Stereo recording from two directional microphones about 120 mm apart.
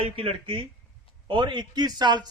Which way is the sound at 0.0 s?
50° right (ahead or behind).